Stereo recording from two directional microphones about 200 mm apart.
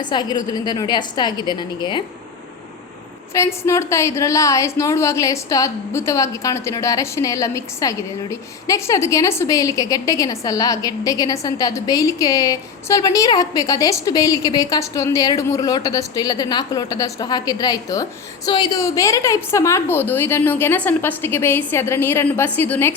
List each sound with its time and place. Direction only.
0.0 s a woman's voice: 20° left (ahead or behind)
3.3 s a woman's voice: 15° left (ahead or behind)